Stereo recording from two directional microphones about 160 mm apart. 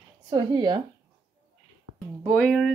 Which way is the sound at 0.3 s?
30° right (ahead or behind).